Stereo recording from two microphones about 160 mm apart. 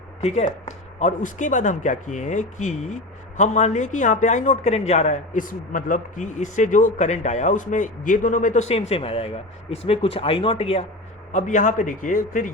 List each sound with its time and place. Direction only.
0.2 s speech: 45° left (ahead or behind)
11.3 s speech: 50° left (ahead or behind)